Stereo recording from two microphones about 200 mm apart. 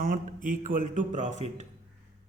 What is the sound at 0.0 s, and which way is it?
Speech, 45° right (ahead or behind).